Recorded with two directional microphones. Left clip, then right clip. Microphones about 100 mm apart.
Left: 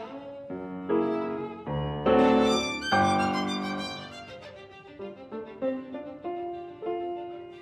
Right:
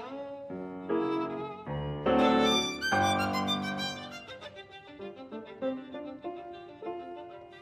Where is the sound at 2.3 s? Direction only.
40° right (ahead or behind).